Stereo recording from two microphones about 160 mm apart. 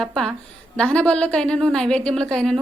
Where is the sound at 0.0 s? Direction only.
Centre (ahead or behind).